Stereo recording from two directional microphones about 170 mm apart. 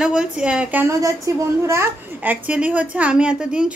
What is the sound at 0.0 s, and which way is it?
A woman's voice, 5° right (ahead or behind).